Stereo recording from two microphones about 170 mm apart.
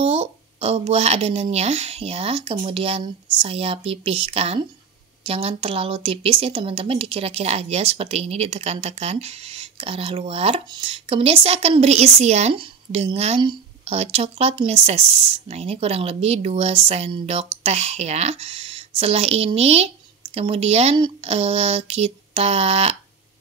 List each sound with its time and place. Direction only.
0.0 s a woman's voice: 35° right (ahead or behind)